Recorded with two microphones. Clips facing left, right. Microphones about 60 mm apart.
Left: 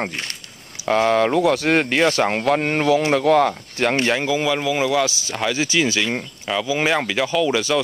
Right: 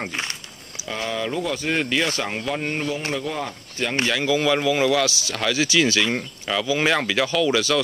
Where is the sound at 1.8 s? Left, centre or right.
Left.